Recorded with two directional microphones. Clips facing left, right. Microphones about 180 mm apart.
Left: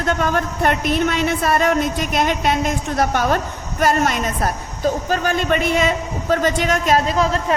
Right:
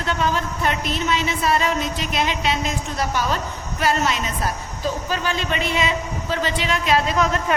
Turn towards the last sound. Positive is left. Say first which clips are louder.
# left 2 dB
turn(degrees=35)  # may be behind; listen again after turning